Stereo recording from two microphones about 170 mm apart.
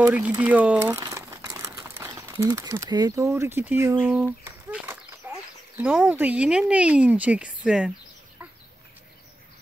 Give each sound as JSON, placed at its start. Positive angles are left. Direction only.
{"t": 0.0, "sound": "speech", "side_deg": -10}
{"t": 0.9, "sound": "crumpling", "side_deg": -20}
{"t": 4.0, "sound": "a sound", "side_deg": -10}
{"t": 5.8, "sound": "speech", "side_deg": -10}